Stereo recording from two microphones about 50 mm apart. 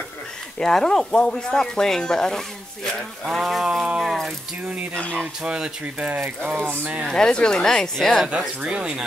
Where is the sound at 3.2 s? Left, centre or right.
Centre.